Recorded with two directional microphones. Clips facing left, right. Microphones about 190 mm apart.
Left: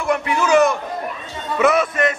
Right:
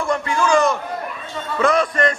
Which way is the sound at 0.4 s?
5° left (ahead or behind).